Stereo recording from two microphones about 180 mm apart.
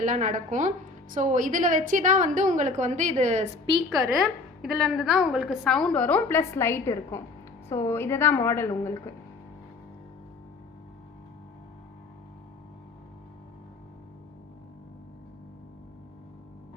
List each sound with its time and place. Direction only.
0.0 s a woman's voice: 45° right (ahead or behind)
4.2 s a woman's voice: centre (ahead or behind); by 8.7 s 15° left (ahead or behind)